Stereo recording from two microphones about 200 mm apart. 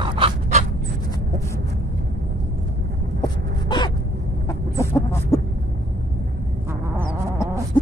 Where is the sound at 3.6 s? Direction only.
20° left (ahead or behind).